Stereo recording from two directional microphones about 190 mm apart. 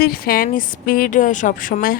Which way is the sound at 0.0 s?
50° left (ahead or behind).